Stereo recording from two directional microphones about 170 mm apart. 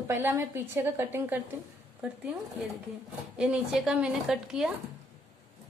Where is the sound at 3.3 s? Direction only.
5° right (ahead or behind).